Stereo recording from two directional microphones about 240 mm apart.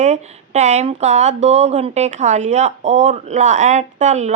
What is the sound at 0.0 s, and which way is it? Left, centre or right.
Speech, right.